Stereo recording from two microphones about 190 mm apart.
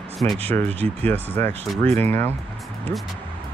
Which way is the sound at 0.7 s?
30° right (ahead or behind).